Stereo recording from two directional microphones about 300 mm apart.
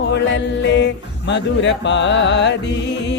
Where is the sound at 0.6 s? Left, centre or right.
Left.